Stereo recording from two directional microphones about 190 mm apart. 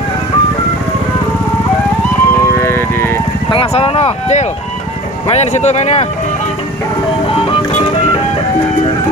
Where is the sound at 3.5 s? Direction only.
30° left (ahead or behind).